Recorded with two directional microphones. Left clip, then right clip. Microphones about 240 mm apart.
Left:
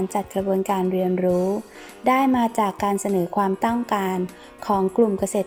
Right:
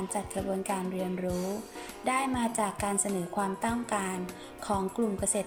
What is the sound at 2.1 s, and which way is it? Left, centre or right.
Speech, left.